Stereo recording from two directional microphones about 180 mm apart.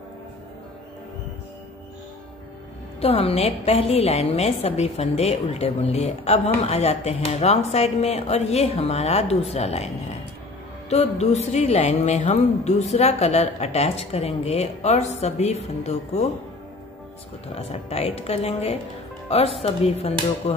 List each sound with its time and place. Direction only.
3.0 s a woman's voice: 35° left (ahead or behind)
10.9 s a woman's voice: 35° left (ahead or behind)
17.6 s a woman's voice: 35° left (ahead or behind)